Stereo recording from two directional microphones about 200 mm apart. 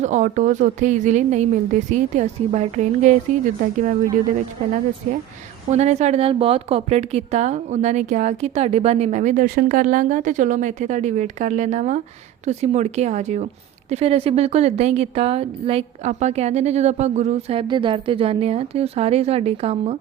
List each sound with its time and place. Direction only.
0.0 s speech: 35° right (ahead or behind)
5.7 s speech: 35° right (ahead or behind)